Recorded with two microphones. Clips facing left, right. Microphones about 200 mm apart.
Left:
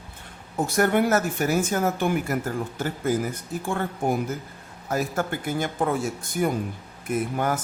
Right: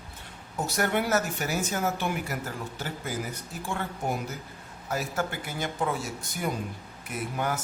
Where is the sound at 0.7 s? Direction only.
50° left (ahead or behind).